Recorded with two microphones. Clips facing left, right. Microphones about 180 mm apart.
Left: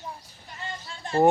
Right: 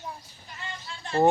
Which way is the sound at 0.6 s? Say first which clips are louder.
Left 2 dB; 40° left (ahead or behind).